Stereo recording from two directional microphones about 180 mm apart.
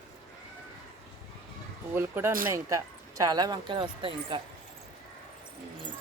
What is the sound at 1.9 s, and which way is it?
Speech, 15° right (ahead or behind).